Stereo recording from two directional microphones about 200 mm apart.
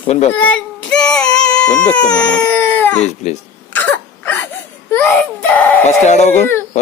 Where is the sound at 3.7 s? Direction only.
10° left (ahead or behind).